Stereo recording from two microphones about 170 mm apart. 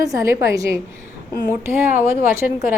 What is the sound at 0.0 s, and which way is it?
A woman's voice, 20° right (ahead or behind).